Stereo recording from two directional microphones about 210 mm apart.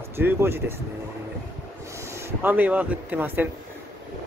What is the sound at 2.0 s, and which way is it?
Speech, 10° right (ahead or behind).